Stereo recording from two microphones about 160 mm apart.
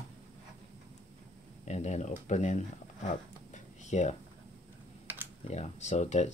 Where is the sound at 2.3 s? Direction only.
50° left (ahead or behind).